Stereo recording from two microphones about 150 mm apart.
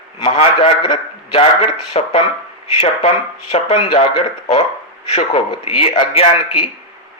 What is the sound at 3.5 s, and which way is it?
A man's voice, 45° left (ahead or behind).